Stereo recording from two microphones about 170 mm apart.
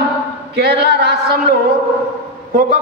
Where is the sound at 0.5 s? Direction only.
65° right (ahead or behind).